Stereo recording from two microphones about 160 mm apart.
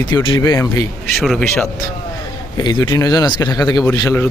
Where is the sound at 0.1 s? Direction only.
25° left (ahead or behind).